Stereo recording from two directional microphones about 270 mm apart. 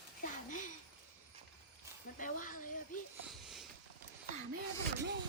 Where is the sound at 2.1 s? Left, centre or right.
Left.